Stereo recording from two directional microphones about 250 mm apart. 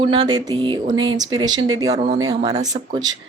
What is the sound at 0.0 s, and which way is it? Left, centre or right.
Speech, right.